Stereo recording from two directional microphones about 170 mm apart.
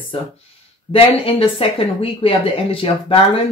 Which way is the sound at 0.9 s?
35° left (ahead or behind).